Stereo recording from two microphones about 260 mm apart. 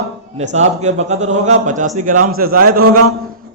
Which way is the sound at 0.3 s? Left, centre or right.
Right.